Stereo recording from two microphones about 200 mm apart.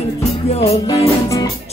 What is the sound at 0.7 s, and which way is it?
Music, 15° left (ahead or behind).